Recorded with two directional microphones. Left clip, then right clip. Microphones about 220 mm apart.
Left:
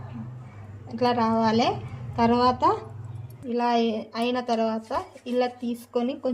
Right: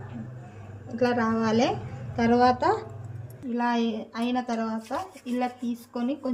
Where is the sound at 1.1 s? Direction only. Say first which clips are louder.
Left 3 dB; 35° left (ahead or behind).